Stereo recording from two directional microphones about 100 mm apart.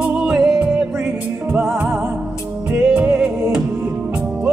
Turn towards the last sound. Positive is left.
turn(degrees=-5)  # may be behind; listen again after turning